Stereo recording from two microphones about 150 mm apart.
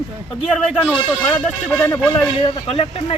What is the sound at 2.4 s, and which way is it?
Speech, 40° left (ahead or behind).